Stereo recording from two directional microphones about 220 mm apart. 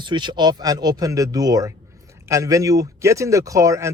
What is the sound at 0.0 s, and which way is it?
Speech, 20° right (ahead or behind).